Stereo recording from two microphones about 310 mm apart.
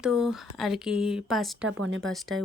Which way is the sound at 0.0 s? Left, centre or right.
Centre.